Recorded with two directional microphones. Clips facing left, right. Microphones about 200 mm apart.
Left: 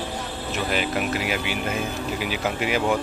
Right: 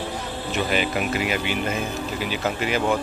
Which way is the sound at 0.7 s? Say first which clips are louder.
Even; centre (ahead or behind).